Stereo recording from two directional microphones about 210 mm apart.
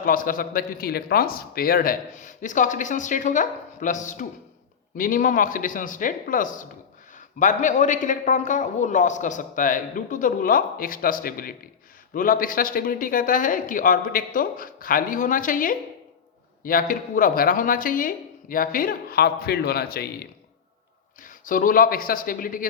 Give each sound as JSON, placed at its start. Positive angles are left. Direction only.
{"t": 0.0, "sound": "a man's voice", "side_deg": 40}
{"t": 21.2, "sound": "a man's voice", "side_deg": 40}